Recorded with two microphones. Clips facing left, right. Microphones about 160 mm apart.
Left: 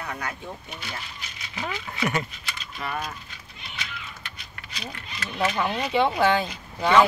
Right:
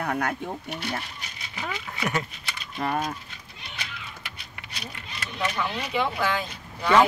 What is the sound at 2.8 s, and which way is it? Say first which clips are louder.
Speech: right 5 dB; 40° right (ahead or behind).